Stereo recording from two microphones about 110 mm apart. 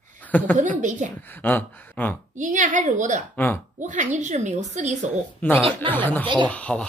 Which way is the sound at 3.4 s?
20° left (ahead or behind).